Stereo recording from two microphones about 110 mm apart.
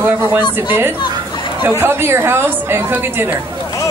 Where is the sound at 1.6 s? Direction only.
20° right (ahead or behind).